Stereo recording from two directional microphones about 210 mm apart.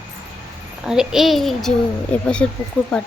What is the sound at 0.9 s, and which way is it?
A child's voice, centre (ahead or behind).